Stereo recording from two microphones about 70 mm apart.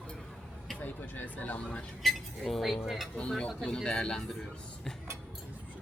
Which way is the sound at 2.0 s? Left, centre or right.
Centre.